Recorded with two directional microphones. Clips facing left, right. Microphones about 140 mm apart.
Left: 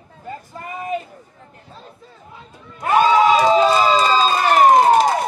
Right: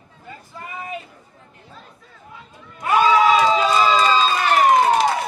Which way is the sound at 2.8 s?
35° left (ahead or behind).